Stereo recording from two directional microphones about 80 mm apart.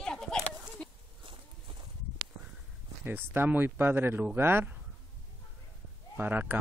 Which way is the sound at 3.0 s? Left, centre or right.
Right.